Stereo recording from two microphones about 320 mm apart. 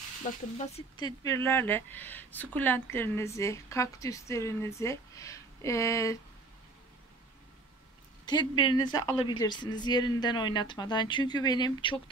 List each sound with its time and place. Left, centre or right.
0.3 s speech: left
8.3 s speech: centre